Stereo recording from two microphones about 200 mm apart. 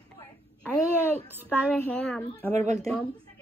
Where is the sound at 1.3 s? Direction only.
10° right (ahead or behind).